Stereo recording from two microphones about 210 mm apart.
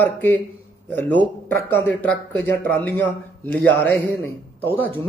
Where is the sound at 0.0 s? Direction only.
10° left (ahead or behind).